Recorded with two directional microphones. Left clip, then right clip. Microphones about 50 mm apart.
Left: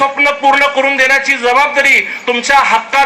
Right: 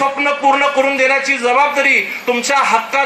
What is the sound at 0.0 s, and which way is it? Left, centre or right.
Speech, left.